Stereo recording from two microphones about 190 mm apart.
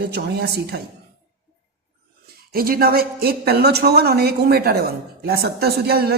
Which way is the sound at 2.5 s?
50° right (ahead or behind).